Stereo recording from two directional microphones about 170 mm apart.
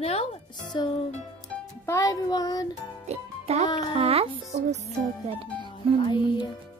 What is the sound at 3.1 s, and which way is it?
Music, 40° right (ahead or behind).